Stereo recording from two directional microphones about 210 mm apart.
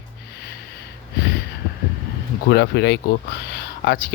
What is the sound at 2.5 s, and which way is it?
Speech, 50° left (ahead or behind).